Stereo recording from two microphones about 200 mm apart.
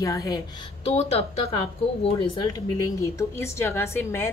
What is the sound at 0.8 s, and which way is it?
A woman's voice, 30° left (ahead or behind).